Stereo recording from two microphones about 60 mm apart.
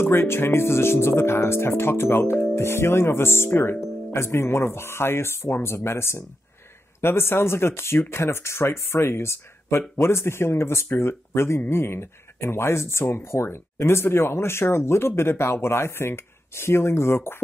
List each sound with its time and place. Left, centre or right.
0.0 s speech: left